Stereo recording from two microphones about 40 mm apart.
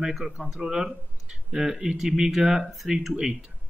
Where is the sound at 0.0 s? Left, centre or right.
Centre.